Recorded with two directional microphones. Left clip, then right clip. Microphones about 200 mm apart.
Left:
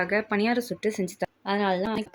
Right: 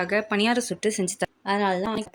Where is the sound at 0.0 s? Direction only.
5° right (ahead or behind).